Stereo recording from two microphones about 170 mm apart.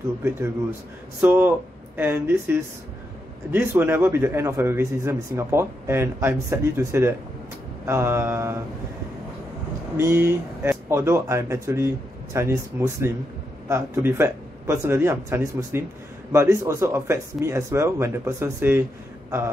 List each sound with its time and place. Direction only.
1.2 s a man's voice: 10° right (ahead or behind)
3.5 s a man's voice: 15° right (ahead or behind)
9.9 s a man's voice: 15° right (ahead or behind)